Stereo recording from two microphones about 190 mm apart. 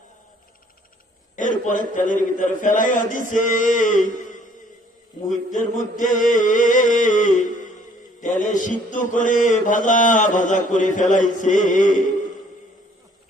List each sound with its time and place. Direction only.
1.4 s a man's voice: 40° left (ahead or behind)
8.2 s mantra: 40° left (ahead or behind)
11.3 s a man's voice: 40° left (ahead or behind)